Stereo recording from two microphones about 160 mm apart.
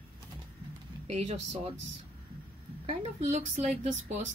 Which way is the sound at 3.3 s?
50° right (ahead or behind).